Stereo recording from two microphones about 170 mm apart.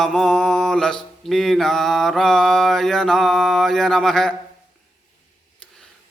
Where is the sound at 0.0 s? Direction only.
Centre (ahead or behind).